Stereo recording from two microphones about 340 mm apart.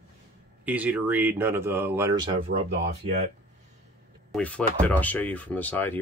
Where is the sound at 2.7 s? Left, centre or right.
Right.